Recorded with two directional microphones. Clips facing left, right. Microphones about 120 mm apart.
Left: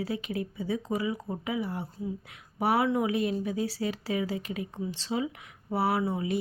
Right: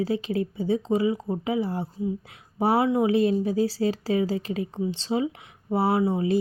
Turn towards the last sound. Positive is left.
turn(degrees=-30)  # may be behind; listen again after turning